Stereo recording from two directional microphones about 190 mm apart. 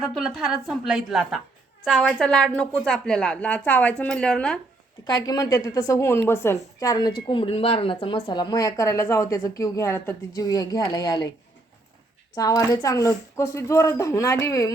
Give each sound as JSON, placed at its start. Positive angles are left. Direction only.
{"t": 0.0, "sound": "a woman's voice", "side_deg": 0}
{"t": 5.0, "sound": "a woman's voice", "side_deg": 20}
{"t": 12.4, "sound": "speech", "side_deg": 20}